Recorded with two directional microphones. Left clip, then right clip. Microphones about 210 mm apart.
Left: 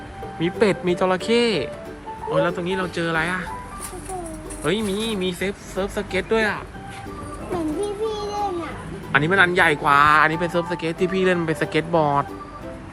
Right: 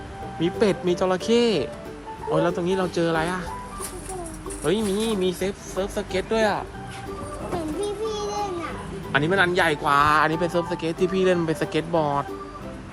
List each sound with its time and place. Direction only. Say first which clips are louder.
0.3 s speech: left 2 dB; 10° right (ahead or behind)
4.6 s speech: even; 15° right (ahead or behind)
7.8 s a sound: left 2 dB; centre (ahead or behind)
9.1 s speech: left 4 dB; 10° right (ahead or behind)